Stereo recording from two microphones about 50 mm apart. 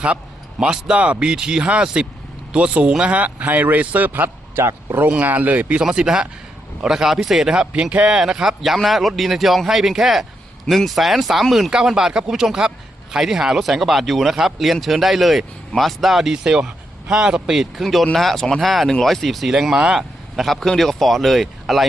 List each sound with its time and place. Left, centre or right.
0.6 s speech: right
4.6 s speech: right
5.2 s speech: right
5.8 s speech: centre
7.7 s speech: right; by 11.7 s centre
11.7 s speech: centre